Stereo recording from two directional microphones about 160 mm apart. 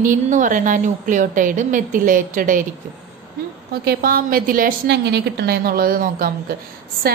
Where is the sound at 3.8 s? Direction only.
65° right (ahead or behind).